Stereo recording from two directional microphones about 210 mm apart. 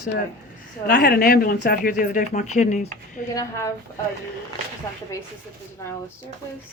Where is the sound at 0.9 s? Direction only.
50° left (ahead or behind).